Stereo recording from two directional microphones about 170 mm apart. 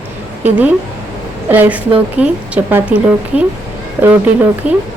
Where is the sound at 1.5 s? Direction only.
10° right (ahead or behind).